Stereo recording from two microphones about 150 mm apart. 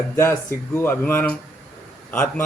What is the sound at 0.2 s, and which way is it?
A man's voice, 15° left (ahead or behind).